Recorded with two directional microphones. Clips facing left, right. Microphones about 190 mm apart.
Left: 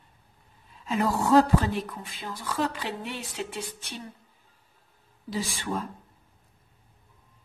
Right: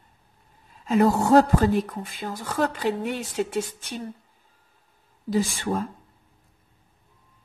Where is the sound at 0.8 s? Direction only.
45° right (ahead or behind).